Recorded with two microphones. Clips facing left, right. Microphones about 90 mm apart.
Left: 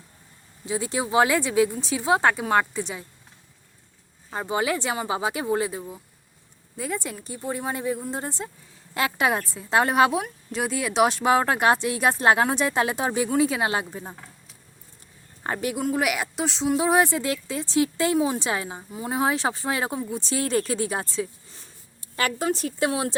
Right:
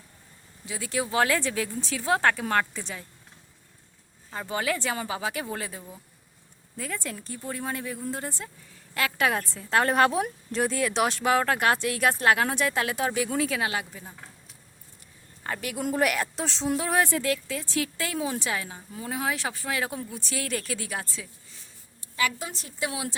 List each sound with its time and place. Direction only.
0.6 s speech: 25° left (ahead or behind)
4.3 s a woman's voice: 20° left (ahead or behind)
15.4 s a woman's voice: 25° left (ahead or behind)
15.8 s speech: 5° left (ahead or behind)
16.7 s a woman's voice: 15° left (ahead or behind)
22.1 s speech: 50° left (ahead or behind)
22.9 s speech: 40° left (ahead or behind)